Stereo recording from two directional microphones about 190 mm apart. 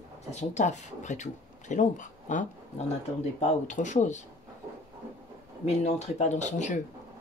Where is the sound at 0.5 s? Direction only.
40° left (ahead or behind).